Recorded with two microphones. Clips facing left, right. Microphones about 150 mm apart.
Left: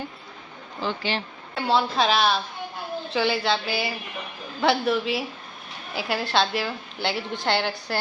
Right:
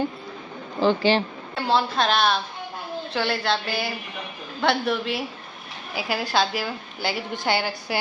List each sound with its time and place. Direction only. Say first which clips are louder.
0.9 s speech: right 9 dB; 30° right (ahead or behind)
1.5 s a woman's voice: even; centre (ahead or behind)